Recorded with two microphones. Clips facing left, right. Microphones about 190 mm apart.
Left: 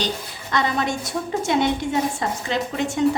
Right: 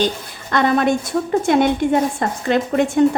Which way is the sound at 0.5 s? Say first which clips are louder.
Right 7 dB; 55° right (ahead or behind).